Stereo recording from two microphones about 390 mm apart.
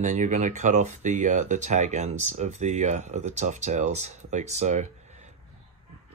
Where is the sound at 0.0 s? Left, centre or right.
Centre.